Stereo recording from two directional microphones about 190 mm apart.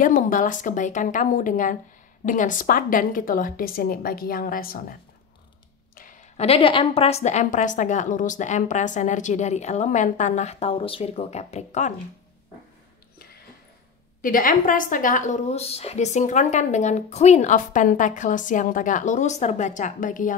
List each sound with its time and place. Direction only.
0.0 s a woman's voice: 45° left (ahead or behind)
5.9 s a sound: 45° left (ahead or behind)
6.4 s a woman's voice: 30° left (ahead or behind)
14.2 s a woman's voice: 45° left (ahead or behind)